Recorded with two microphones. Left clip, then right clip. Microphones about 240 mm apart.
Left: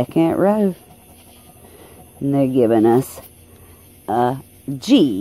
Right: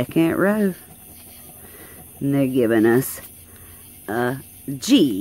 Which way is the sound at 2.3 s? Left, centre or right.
Centre.